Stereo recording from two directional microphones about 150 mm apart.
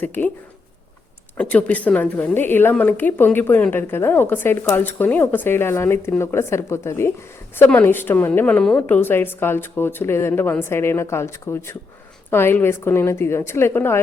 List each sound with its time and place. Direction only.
0.0 s a woman's voice: 10° left (ahead or behind)
1.4 s a woman's voice: 10° left (ahead or behind)